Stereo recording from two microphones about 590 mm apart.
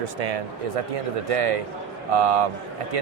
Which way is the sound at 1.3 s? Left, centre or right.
Right.